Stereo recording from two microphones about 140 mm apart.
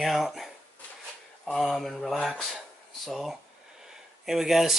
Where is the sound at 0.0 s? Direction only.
Centre (ahead or behind).